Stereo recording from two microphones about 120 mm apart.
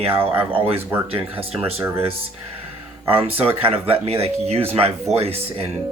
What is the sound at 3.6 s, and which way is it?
Speech, 55° right (ahead or behind).